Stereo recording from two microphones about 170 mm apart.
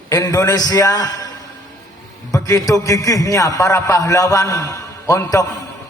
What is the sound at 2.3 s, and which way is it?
A man's voice, 20° left (ahead or behind).